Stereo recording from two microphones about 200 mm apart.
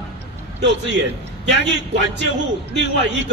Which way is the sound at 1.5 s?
60° right (ahead or behind).